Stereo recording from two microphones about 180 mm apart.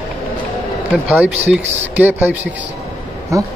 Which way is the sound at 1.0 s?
5° right (ahead or behind).